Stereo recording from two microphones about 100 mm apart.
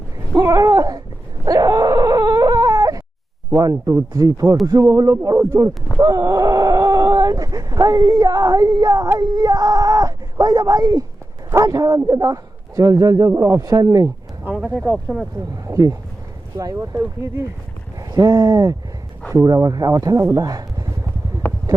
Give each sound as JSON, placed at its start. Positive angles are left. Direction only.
{"t": 0.3, "sound": "a sound", "side_deg": -35}
{"t": 1.5, "sound": "dog", "side_deg": -35}
{"t": 3.5, "sound": "speech", "side_deg": -35}
{"t": 14.4, "sound": "a sound", "side_deg": -15}
{"t": 14.8, "sound": "speech", "side_deg": 5}
{"t": 15.6, "sound": "speech", "side_deg": -35}
{"t": 18.0, "sound": "speech", "side_deg": -40}